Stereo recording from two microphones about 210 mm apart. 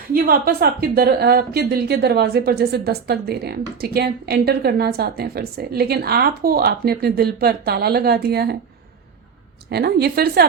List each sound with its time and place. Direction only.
0.1 s a woman's voice: 45° right (ahead or behind)
9.6 s a woman's voice: 50° right (ahead or behind)